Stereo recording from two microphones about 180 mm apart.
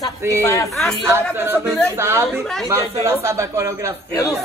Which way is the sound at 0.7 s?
Centre (ahead or behind).